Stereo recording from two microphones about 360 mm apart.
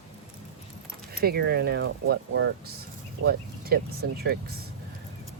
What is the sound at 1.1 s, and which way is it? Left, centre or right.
Speech, right.